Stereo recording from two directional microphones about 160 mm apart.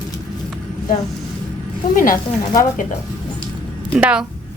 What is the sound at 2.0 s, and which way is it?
Speech, 55° left (ahead or behind).